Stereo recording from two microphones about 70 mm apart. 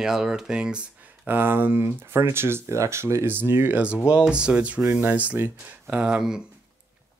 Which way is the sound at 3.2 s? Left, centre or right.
Right.